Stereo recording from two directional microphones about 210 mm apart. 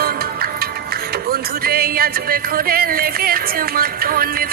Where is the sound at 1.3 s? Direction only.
45° right (ahead or behind).